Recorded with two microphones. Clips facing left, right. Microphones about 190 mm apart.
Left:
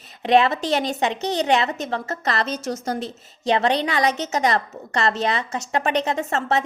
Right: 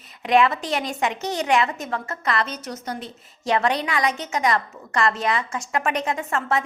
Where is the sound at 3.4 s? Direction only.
25° left (ahead or behind).